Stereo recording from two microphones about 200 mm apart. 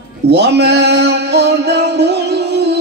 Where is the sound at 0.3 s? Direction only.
55° right (ahead or behind).